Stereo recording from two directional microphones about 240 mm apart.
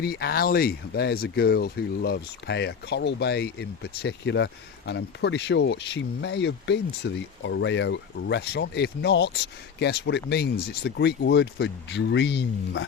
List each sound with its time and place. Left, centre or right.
0.0 s speech: left